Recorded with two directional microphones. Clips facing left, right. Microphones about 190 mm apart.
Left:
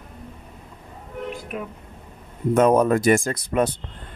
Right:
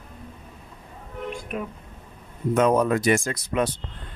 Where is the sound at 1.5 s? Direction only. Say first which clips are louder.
Right 2 dB; 5° left (ahead or behind).